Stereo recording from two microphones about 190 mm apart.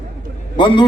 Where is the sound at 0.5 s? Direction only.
25° left (ahead or behind).